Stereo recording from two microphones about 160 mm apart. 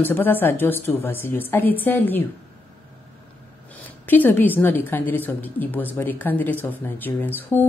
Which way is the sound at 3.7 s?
10° left (ahead or behind).